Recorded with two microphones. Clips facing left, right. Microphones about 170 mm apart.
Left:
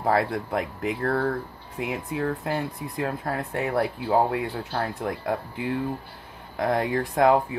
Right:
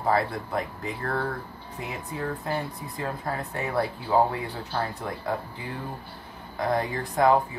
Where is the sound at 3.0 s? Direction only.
65° left (ahead or behind).